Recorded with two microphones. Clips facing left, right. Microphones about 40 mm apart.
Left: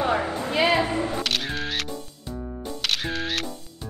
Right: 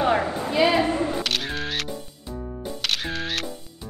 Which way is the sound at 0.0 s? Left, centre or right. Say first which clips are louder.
Right 2 dB; right.